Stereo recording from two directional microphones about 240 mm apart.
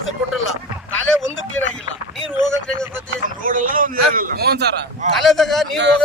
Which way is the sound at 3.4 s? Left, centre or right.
Right.